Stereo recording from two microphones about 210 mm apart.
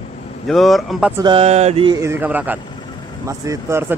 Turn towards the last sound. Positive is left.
turn(degrees=-10)  # may be behind; listen again after turning